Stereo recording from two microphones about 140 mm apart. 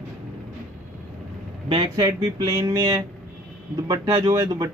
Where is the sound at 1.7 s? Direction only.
30° right (ahead or behind).